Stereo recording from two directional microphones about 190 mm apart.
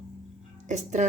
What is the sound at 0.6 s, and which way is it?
Speech, 40° right (ahead or behind).